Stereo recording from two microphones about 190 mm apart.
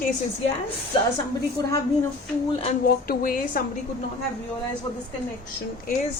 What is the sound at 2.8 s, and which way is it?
Speech, 50° left (ahead or behind).